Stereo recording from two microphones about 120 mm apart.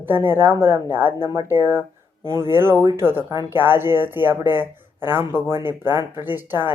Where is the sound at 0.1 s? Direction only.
20° right (ahead or behind).